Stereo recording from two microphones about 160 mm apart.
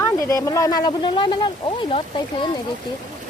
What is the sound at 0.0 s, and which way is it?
Speech, 20° left (ahead or behind).